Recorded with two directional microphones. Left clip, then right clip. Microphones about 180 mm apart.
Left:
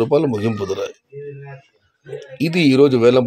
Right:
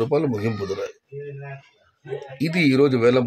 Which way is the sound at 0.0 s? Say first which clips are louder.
Left 5 dB; 25° left (ahead or behind).